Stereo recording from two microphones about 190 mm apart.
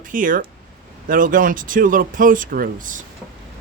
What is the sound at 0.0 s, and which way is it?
Speech, 45° right (ahead or behind).